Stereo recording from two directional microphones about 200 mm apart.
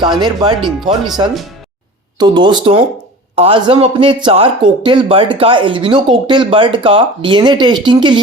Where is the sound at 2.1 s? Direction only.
20° right (ahead or behind).